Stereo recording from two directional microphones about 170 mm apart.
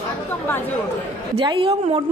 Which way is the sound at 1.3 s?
30° right (ahead or behind).